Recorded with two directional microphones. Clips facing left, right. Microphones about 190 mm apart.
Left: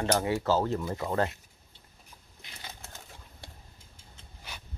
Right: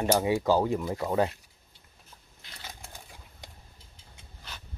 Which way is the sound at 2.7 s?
15° right (ahead or behind).